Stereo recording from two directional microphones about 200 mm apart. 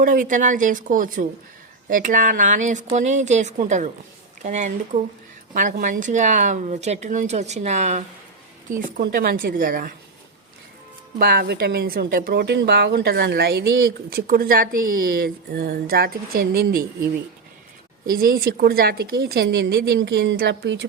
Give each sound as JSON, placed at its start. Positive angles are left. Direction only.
{"t": 0.0, "sound": "speech", "side_deg": -40}
{"t": 8.7, "sound": "a woman's voice", "side_deg": -50}
{"t": 11.2, "sound": "a woman's voice", "side_deg": -50}
{"t": 18.0, "sound": "a woman's voice", "side_deg": -45}